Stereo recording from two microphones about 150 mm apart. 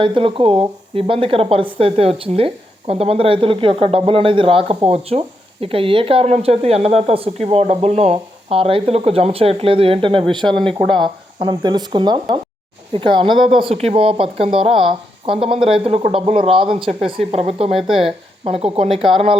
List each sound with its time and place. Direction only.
0.0 s speech: 35° right (ahead or behind)
17.7 s speech: centre (ahead or behind)
18.0 s speech: 40° right (ahead or behind)